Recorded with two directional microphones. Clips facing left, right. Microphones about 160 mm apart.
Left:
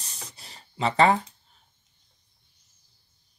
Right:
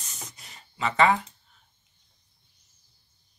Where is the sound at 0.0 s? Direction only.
35° left (ahead or behind).